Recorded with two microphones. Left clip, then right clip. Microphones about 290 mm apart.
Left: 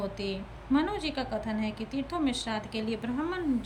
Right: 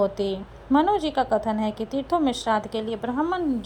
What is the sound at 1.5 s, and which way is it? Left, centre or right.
Speech, right.